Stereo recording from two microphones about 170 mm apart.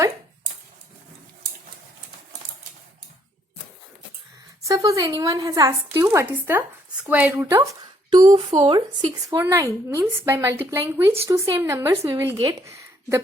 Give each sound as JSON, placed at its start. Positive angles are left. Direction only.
{"t": 4.7, "sound": "a woman's voice", "side_deg": -20}
{"t": 9.4, "sound": "speech", "side_deg": -15}